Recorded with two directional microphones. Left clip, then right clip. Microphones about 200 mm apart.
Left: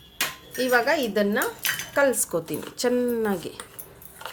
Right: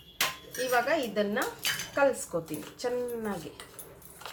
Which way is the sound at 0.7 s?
50° left (ahead or behind).